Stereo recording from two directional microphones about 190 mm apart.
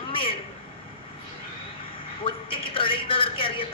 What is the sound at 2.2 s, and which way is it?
A man's voice, 30° left (ahead or behind).